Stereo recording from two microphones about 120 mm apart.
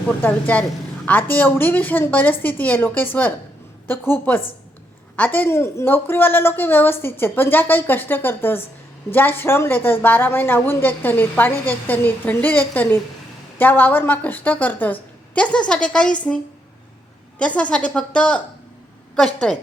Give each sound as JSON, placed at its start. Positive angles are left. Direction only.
{"t": 0.1, "sound": "a woman's voice", "side_deg": 10}
{"t": 17.3, "sound": "a woman's voice", "side_deg": 10}